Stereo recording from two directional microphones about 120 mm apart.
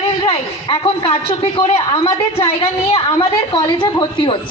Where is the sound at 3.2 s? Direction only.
35° left (ahead or behind).